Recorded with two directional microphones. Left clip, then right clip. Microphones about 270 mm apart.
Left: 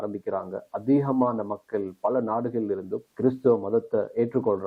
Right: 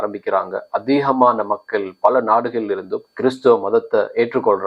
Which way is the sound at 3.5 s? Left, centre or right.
Right.